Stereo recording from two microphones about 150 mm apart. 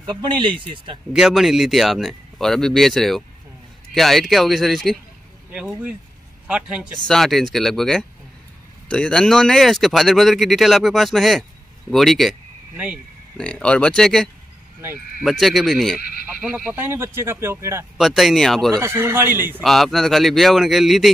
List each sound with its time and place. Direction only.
0.0 s speech: 30° right (ahead or behind)
1.1 s a man's voice: 5° right (ahead or behind)
13.4 s speech: 5° left (ahead or behind)
16.0 s speech: 80° left
16.3 s speech: 10° right (ahead or behind)
17.9 s speech: centre (ahead or behind)
18.7 s speech: 15° right (ahead or behind)
19.6 s speech: centre (ahead or behind)